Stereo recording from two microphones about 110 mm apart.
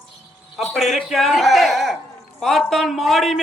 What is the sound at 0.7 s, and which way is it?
A man's voice, centre (ahead or behind).